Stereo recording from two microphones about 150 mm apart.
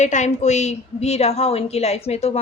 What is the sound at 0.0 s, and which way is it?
A woman's voice, 50° left (ahead or behind).